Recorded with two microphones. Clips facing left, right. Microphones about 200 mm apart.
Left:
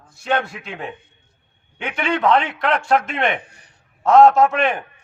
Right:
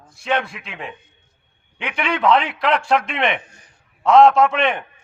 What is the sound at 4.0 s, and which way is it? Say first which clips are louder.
Speech: even; 5° left (ahead or behind).